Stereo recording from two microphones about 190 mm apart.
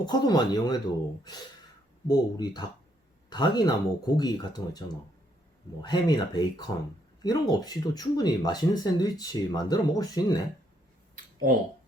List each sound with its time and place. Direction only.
0.0 s speech: 20° left (ahead or behind)
2.0 s speech: 20° left (ahead or behind)
5.8 s speech: 20° left (ahead or behind)
11.4 s speech: 45° right (ahead or behind)